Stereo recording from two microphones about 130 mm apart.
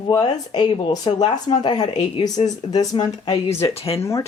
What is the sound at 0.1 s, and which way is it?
Speech, 30° left (ahead or behind).